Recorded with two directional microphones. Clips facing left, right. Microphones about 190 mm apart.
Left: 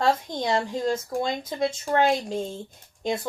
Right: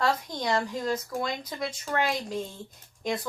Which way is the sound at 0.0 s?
25° left (ahead or behind).